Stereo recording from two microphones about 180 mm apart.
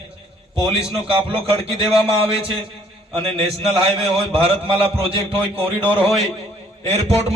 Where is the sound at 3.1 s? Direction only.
30° right (ahead or behind).